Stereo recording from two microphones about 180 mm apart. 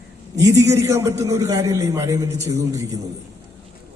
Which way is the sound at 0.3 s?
20° right (ahead or behind).